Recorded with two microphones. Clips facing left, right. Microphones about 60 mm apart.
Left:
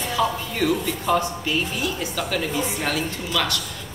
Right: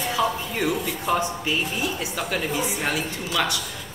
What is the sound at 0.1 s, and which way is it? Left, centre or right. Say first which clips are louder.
Speech: left 2 dB; centre.